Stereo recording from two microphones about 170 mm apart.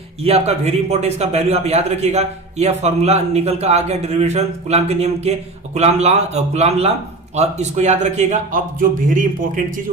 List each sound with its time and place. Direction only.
0.3 s a man's voice: 40° right (ahead or behind)
8.8 s speech: 50° right (ahead or behind)